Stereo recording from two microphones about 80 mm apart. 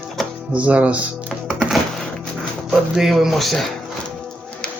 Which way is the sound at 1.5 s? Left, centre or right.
Centre.